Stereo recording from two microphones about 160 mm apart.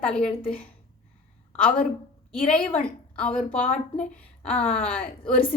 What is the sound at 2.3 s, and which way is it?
A woman's voice, 5° left (ahead or behind).